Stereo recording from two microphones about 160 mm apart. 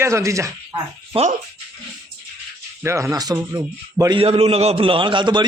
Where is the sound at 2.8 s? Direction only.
15° right (ahead or behind).